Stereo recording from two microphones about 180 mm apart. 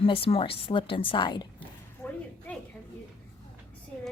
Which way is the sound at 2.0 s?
10° left (ahead or behind).